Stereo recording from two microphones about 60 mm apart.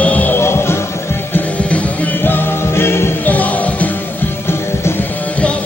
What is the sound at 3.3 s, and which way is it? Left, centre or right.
Music, left.